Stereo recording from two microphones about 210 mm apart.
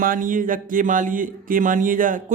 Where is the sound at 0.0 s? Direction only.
40° right (ahead or behind).